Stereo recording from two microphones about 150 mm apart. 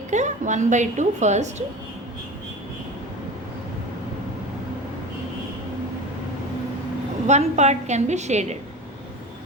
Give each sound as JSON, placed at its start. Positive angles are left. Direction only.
{"t": 0.1, "sound": "a woman's voice", "side_deg": -55}
{"t": 7.3, "sound": "a woman's voice", "side_deg": -50}